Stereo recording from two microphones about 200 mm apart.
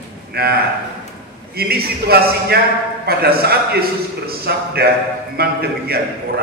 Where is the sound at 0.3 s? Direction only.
50° right (ahead or behind).